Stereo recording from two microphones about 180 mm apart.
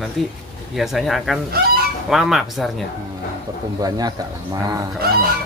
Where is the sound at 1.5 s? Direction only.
60° right (ahead or behind).